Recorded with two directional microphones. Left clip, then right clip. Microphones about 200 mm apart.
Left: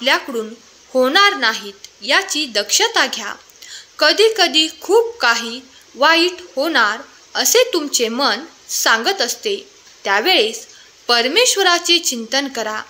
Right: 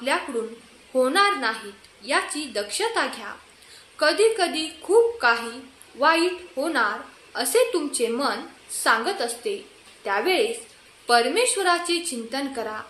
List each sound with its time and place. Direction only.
0.9 s a woman's voice: 45° left (ahead or behind)